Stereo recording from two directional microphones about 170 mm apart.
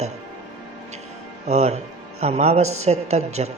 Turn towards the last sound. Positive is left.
turn(degrees=-40)  # may be behind; listen again after turning